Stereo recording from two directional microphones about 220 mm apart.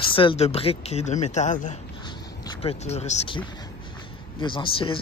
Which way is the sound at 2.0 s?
20° left (ahead or behind).